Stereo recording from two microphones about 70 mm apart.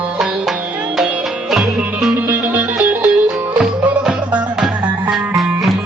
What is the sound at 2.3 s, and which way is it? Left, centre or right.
Music, right.